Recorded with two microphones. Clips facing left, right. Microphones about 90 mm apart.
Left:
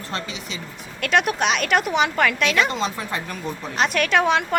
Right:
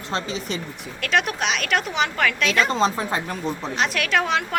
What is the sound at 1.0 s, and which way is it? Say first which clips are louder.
A woman's voice: left 3 dB; centre (ahead or behind).